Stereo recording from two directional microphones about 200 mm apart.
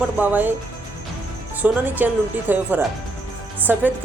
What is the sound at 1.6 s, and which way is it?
A woman's voice, 10° right (ahead or behind).